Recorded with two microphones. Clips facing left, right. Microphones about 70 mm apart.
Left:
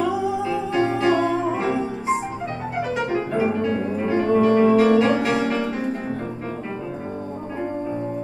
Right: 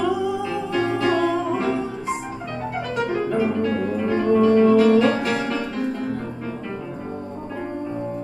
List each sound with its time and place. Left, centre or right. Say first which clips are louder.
0.1 s music: left 1 dB; left
3.0 s piano: right 2 dB; left
3.7 s music: even; left